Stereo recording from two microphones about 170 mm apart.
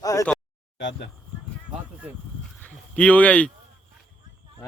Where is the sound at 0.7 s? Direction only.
90° left.